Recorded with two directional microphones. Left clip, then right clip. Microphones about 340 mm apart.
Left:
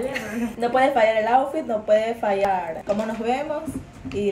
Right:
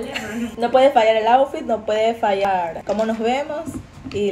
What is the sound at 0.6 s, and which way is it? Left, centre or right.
Speech, centre.